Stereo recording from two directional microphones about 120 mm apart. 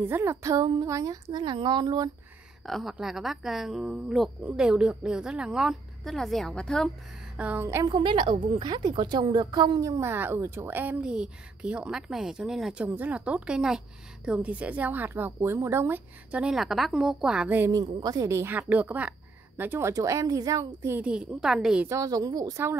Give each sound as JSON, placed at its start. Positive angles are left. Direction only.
{"t": 0.0, "sound": "a woman's voice", "side_deg": -20}
{"t": 2.6, "sound": "a woman's voice", "side_deg": 0}
{"t": 7.3, "sound": "a woman's voice", "side_deg": -10}
{"t": 7.6, "sound": "a woman's voice", "side_deg": -25}
{"t": 7.9, "sound": "a woman's voice", "side_deg": -45}
{"t": 17.6, "sound": "a woman's voice", "side_deg": -30}
{"t": 20.9, "sound": "a woman's voice", "side_deg": -10}
{"t": 21.8, "sound": "a woman's voice", "side_deg": -30}